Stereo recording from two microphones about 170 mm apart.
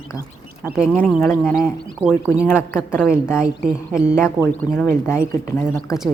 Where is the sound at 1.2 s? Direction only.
15° left (ahead or behind).